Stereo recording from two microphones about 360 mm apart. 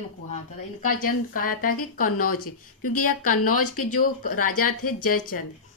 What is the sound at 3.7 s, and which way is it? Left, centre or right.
Speech, left.